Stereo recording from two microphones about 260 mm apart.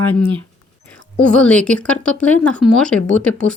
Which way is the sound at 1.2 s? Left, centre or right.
Centre.